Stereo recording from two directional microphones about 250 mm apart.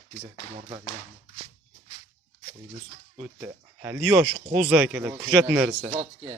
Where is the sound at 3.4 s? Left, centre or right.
Centre.